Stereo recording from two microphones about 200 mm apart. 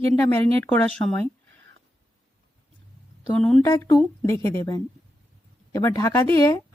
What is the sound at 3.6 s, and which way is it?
Speech, 15° left (ahead or behind).